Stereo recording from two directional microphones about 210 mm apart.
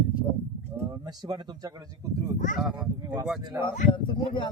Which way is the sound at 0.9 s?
20° right (ahead or behind).